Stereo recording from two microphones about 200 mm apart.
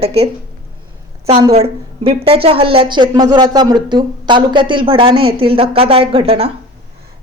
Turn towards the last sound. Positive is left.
turn(degrees=-30)  # may be behind; listen again after turning